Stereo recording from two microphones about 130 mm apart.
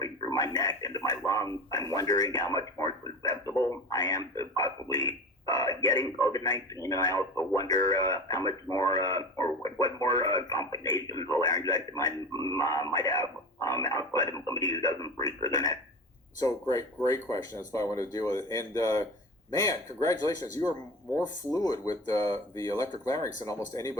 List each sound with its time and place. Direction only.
0.0 s a man's voice: 25° left (ahead or behind)